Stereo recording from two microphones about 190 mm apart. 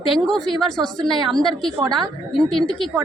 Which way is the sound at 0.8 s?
25° right (ahead or behind).